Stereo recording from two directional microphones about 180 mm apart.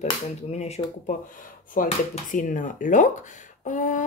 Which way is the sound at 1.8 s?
50° left (ahead or behind).